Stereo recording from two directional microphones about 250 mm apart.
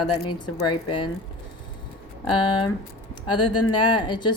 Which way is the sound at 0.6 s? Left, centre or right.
Centre.